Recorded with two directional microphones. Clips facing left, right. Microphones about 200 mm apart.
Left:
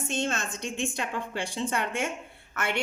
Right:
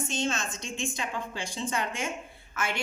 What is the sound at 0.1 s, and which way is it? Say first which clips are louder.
A woman's voice: left 3 dB; 60° left (ahead or behind).